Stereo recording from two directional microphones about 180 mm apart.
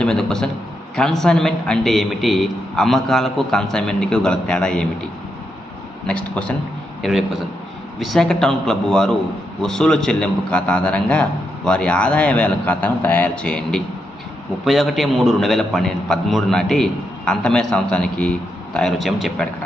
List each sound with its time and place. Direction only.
0.0 s a man's voice: 5° left (ahead or behind)
6.0 s a man's voice: 5° left (ahead or behind)